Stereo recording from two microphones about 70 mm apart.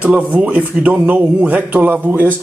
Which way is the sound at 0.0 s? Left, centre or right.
Right.